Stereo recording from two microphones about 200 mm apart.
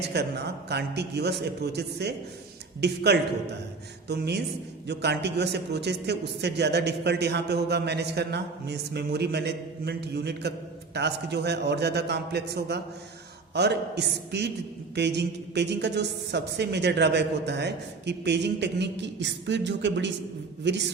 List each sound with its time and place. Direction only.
0.0 s a man's voice: 55° right (ahead or behind)